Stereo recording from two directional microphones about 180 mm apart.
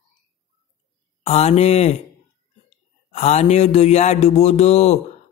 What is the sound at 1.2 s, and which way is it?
Speech, 35° left (ahead or behind).